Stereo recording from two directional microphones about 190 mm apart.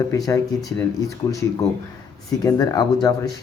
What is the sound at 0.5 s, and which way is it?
Speech, centre (ahead or behind).